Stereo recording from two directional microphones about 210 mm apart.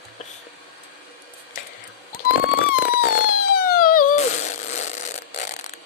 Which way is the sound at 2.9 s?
45° left (ahead or behind).